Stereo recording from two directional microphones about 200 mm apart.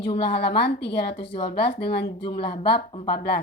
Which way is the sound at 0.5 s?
55° left (ahead or behind).